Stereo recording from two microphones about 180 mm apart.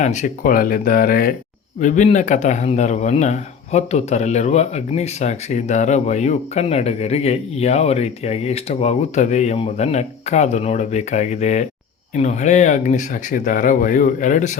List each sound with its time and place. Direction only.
0.0 s speech: 40° left (ahead or behind)
1.8 s a man's voice: 45° left (ahead or behind)